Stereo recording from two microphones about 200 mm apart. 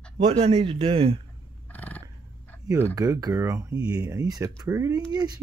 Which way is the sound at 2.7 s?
15° right (ahead or behind).